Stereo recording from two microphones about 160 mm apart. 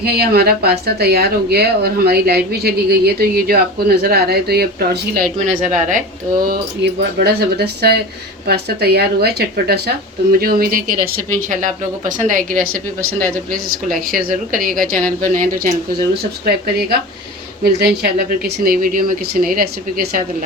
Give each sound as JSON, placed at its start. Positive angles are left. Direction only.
{"t": 0.0, "sound": "speech", "side_deg": -80}
{"t": 6.8, "sound": "speech", "side_deg": -90}
{"t": 10.3, "sound": "speech", "side_deg": -65}
{"t": 17.6, "sound": "speech", "side_deg": -85}